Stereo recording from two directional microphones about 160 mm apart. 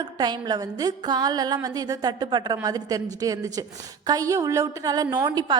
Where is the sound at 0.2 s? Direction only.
25° right (ahead or behind).